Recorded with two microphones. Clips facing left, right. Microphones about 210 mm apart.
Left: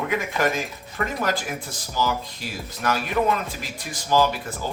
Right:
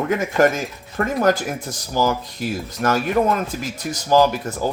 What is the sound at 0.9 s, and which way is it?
Speech, 45° right (ahead or behind).